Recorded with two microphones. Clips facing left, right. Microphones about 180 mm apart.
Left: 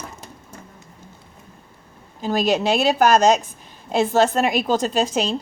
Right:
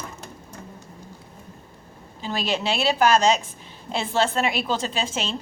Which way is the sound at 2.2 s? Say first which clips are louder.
Left 6 dB; 45° left (ahead or behind).